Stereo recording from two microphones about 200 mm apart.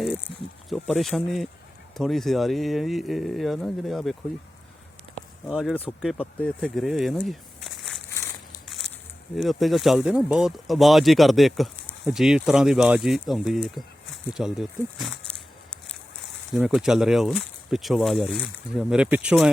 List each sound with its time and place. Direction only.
0.7 s speech: centre (ahead or behind)
5.1 s a sound: centre (ahead or behind)
6.0 s speech: centre (ahead or behind)
8.1 s crumpling: 15° left (ahead or behind)
8.6 s a sound: centre (ahead or behind)
9.3 s speech: centre (ahead or behind)
16.6 s speech: centre (ahead or behind)